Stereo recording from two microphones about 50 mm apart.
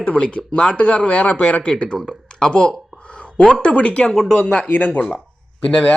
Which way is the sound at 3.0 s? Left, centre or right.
Left.